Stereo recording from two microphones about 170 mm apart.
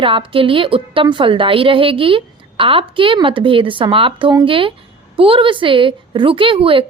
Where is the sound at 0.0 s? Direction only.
30° right (ahead or behind).